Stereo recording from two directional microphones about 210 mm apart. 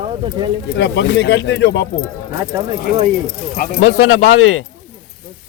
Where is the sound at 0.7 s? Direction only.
60° left (ahead or behind).